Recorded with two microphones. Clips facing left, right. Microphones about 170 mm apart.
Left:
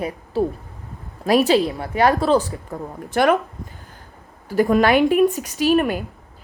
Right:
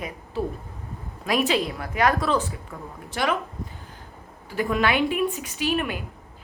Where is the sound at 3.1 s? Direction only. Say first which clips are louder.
Left 9 dB; 55° left (ahead or behind).